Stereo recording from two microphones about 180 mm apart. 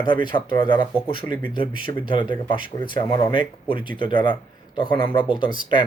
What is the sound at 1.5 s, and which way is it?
Speech, 30° left (ahead or behind).